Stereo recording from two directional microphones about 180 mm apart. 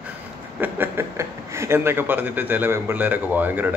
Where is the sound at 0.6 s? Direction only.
10° right (ahead or behind).